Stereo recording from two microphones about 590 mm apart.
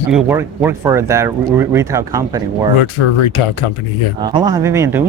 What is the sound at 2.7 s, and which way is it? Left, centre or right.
Speech, left.